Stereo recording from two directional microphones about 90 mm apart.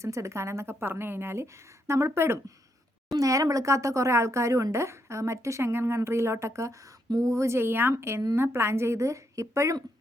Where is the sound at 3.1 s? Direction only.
40° right (ahead or behind).